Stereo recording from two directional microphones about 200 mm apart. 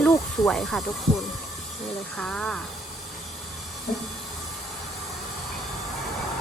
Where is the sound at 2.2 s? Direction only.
5° left (ahead or behind).